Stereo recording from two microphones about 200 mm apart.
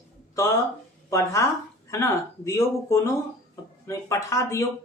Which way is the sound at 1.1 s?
15° left (ahead or behind).